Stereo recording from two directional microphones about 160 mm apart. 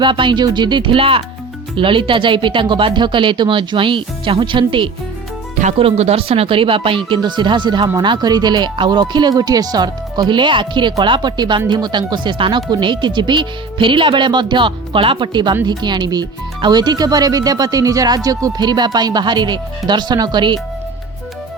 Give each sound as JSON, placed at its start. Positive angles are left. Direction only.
{"t": 0.0, "sound": "speech", "side_deg": -30}